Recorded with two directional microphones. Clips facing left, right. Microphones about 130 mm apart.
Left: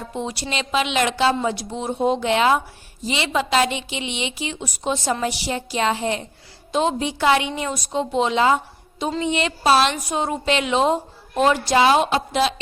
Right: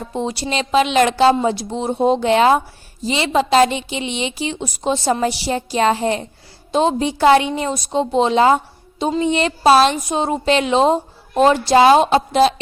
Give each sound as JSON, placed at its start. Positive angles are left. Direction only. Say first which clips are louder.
{"t": 0.1, "sound": "a woman's voice", "louder": "right 6 dB", "side_deg": -30}
{"t": 10.1, "sound": "a woman's voice", "louder": "right 4 dB", "side_deg": -25}